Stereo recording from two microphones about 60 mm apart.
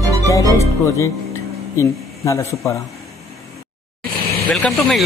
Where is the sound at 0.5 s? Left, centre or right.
Left.